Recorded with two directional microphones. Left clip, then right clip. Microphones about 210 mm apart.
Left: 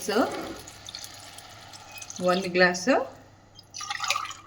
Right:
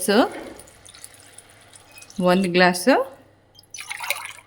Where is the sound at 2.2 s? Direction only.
60° right (ahead or behind).